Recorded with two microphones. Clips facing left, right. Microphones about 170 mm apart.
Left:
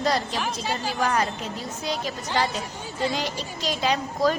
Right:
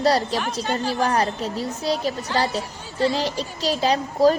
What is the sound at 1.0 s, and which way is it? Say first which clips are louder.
A woman's voice: right 1 dB; 35° right (ahead or behind).